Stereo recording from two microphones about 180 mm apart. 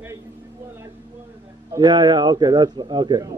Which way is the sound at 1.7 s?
20° right (ahead or behind).